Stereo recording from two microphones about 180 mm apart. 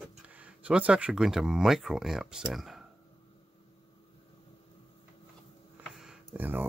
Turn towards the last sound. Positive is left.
turn(degrees=-10)  # may be behind; listen again after turning